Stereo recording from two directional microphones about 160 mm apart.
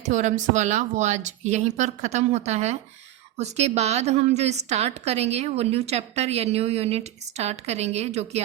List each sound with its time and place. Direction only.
0.1 s a woman's voice: 50° right (ahead or behind)